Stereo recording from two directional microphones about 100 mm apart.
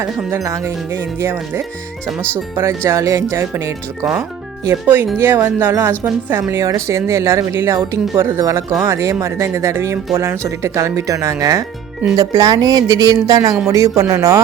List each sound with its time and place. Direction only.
0.3 s a woman's voice: 30° right (ahead or behind)